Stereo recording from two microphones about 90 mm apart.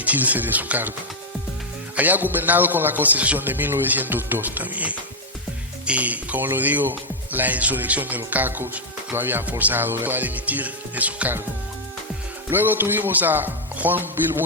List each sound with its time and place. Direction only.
0.0 s speech: 15° right (ahead or behind)
2.0 s speech: 20° right (ahead or behind)
12.5 s speech: 25° right (ahead or behind)